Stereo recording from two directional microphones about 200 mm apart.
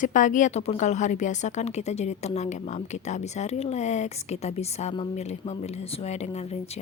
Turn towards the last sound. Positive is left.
turn(degrees=35)  # may be behind; listen again after turning